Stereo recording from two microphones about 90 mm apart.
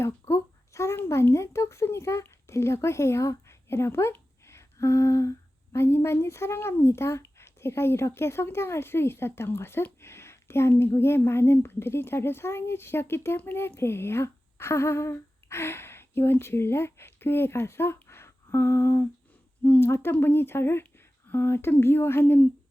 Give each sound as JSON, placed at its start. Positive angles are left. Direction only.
{"t": 0.0, "sound": "a child's voice", "side_deg": 30}